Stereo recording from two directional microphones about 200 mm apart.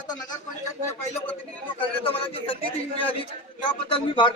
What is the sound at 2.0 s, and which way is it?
A man's voice, 25° left (ahead or behind).